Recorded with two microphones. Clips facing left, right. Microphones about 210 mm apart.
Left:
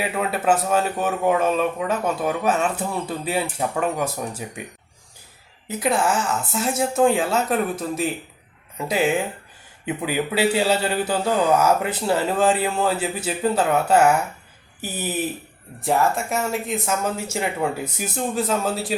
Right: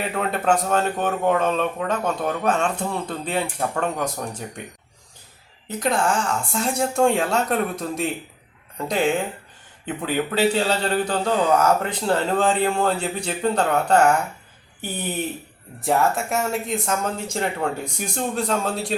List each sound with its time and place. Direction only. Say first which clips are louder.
0.0 s speech: left 1 dB; 5° left (ahead or behind)
5.6 s speech: left 1 dB; 5° left (ahead or behind)